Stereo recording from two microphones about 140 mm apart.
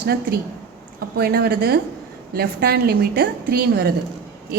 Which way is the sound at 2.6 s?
90° right.